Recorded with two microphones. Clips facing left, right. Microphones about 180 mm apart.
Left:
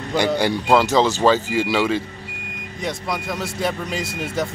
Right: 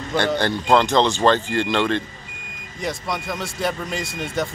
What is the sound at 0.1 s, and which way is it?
Speech, 10° left (ahead or behind).